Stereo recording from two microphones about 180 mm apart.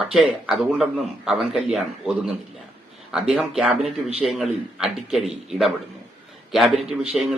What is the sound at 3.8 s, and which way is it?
Speech, 35° right (ahead or behind).